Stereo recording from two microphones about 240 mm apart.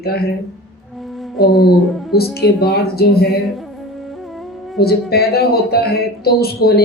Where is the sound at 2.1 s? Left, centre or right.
Left.